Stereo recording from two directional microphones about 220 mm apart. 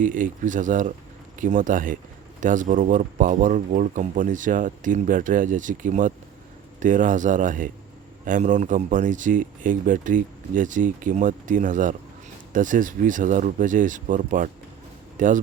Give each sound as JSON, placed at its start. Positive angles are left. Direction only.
{"t": 0.0, "sound": "speech", "side_deg": -35}